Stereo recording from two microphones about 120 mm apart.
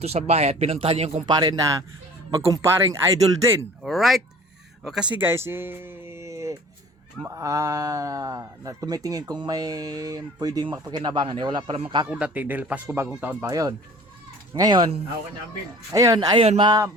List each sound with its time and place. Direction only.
0.0 s speech: 60° right (ahead or behind)
1.3 s speech: 35° right (ahead or behind)
3.8 s speech: centre (ahead or behind)
5.1 s speech: 20° right (ahead or behind); by 12.0 s 45° right (ahead or behind)
12.1 s speech: 10° right (ahead or behind)
13.5 s speech: 30° right (ahead or behind)
15.9 s speech: 30° right (ahead or behind)